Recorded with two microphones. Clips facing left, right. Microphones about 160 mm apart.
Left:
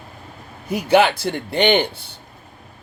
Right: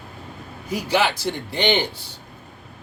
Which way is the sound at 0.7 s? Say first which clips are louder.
Left 6 dB; 55° left (ahead or behind).